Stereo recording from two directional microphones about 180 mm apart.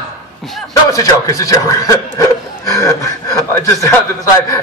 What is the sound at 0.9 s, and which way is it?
A man's voice, 20° left (ahead or behind).